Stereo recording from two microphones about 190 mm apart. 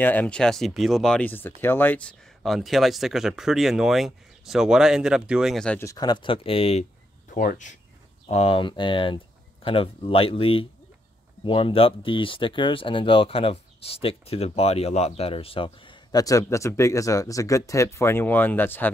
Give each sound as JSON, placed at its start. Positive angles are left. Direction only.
{"t": 0.0, "sound": "speech", "side_deg": 10}
{"t": 5.9, "sound": "speech", "side_deg": 20}
{"t": 8.3, "sound": "speech", "side_deg": 30}